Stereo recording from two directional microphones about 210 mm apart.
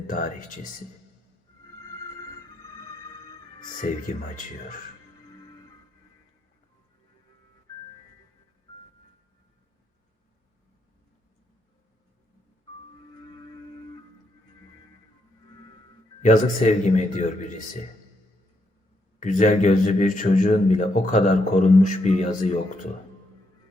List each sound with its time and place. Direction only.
0.1 s a man's voice: 40° left (ahead or behind)
3.8 s a man's voice: 40° left (ahead or behind)
16.2 s a man's voice: 35° left (ahead or behind)
19.2 s a man's voice: 35° left (ahead or behind)